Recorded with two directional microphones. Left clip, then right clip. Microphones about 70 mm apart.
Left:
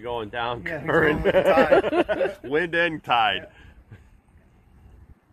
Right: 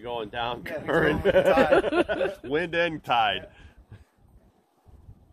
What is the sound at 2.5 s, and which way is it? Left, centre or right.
Speech, right.